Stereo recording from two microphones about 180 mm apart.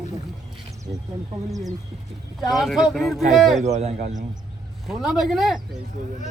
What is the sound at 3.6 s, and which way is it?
Speech, 40° right (ahead or behind).